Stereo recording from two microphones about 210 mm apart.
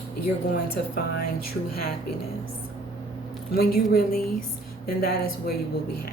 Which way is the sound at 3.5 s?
45° left (ahead or behind).